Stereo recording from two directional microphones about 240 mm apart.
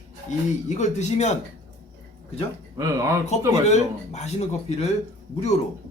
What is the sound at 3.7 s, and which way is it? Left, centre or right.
Speech, left.